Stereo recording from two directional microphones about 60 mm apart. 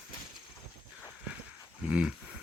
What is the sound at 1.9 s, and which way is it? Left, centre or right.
Dog, right.